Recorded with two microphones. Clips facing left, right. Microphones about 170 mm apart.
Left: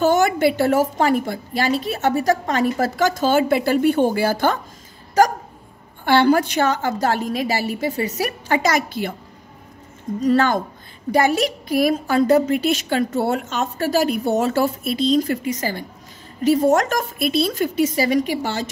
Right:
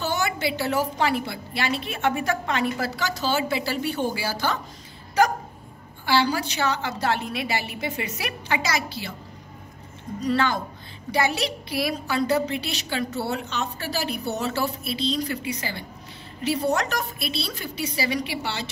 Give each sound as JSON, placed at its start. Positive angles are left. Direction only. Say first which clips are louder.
{"t": 0.0, "sound": "a woman's voice", "louder": "left 10 dB", "side_deg": 50}
{"t": 6.0, "sound": "a woman's voice", "louder": "left 8 dB", "side_deg": 55}
{"t": 10.2, "sound": "a woman's voice", "louder": "left 6 dB", "side_deg": 45}